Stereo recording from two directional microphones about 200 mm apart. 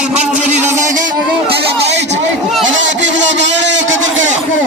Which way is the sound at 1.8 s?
60° right (ahead or behind).